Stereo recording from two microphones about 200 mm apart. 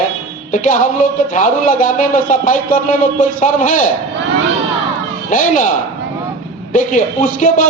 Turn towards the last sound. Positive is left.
turn(degrees=40)  # may be behind; listen again after turning